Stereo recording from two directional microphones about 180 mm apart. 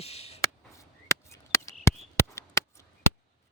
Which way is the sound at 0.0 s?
35° left (ahead or behind).